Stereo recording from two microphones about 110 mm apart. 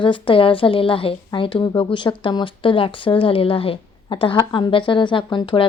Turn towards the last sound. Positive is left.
turn(degrees=45)  # may be behind; listen again after turning